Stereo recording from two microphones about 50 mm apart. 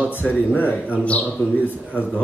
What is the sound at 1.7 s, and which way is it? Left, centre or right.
Speech, left.